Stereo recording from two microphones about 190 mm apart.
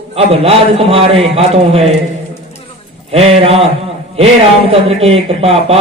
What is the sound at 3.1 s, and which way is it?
Speech, 30° right (ahead or behind).